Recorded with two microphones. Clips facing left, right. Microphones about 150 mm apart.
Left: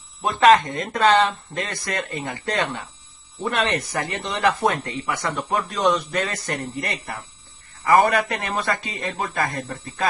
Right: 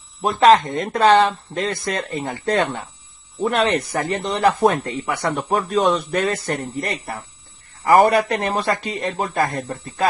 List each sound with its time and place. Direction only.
0.7 s speech: 35° right (ahead or behind)